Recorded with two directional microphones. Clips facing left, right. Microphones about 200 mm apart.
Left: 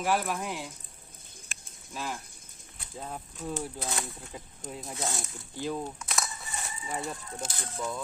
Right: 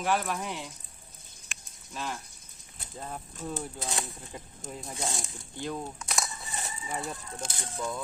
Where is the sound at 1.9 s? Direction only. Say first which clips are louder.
Even; 5° left (ahead or behind).